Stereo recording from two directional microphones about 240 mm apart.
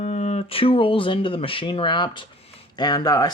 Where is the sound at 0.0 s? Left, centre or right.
Left.